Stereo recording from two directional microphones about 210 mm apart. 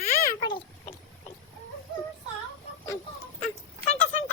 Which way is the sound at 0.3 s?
20° left (ahead or behind).